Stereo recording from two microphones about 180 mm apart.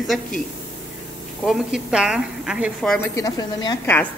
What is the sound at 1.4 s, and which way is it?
A woman's voice, 5° right (ahead or behind).